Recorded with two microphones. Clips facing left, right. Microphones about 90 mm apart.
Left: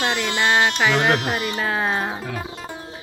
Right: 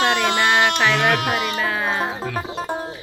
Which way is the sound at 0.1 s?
55° right (ahead or behind).